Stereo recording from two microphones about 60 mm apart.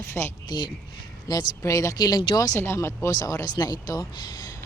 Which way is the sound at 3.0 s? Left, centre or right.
Left.